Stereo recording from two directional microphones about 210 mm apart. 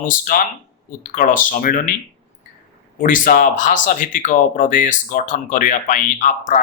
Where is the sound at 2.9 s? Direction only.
40° left (ahead or behind).